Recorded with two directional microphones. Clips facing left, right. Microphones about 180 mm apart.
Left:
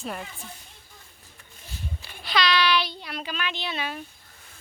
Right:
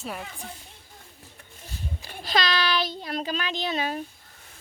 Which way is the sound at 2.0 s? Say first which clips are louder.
Even; 40° right (ahead or behind).